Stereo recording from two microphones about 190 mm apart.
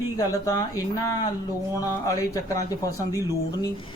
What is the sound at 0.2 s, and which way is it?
A man's voice, 20° left (ahead or behind).